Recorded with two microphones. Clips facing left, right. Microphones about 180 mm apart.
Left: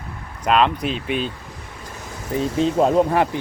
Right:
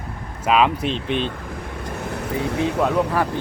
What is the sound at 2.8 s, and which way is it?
Speech, 30° left (ahead or behind).